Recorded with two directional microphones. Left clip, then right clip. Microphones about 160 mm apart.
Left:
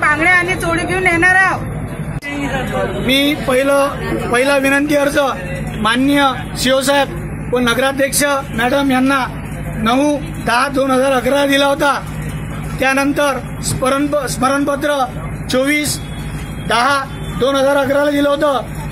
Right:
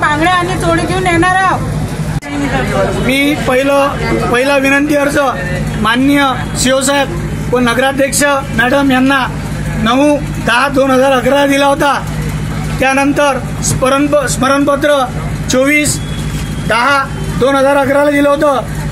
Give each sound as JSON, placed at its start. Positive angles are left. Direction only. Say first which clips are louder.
{"t": 0.0, "sound": "a sound", "louder": "right 1 dB", "side_deg": 20}
{"t": 1.0, "sound": "vehicle", "louder": "even", "side_deg": 15}
{"t": 3.1, "sound": "a man's voice", "louder": "left 1 dB", "side_deg": 0}